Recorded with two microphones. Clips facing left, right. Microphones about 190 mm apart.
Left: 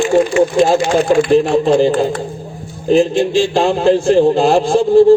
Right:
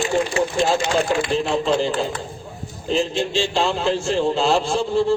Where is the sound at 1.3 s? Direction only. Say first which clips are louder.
Left 8 dB; 55° left (ahead or behind).